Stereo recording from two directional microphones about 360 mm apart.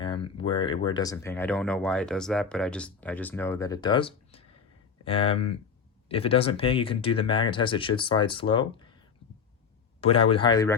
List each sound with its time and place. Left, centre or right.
0.0 s speech: centre
10.0 s speech: centre